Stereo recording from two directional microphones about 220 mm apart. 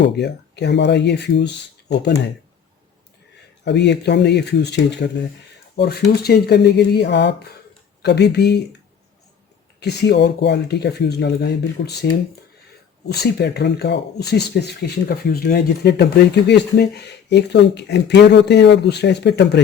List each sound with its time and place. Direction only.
0.0 s speech: 50° left (ahead or behind)
3.6 s speech: 50° left (ahead or behind)
9.8 s speech: 50° left (ahead or behind)
13.2 s speech: 50° left (ahead or behind)